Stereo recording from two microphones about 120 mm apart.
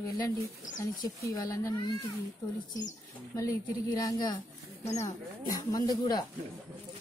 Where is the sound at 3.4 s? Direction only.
30° left (ahead or behind).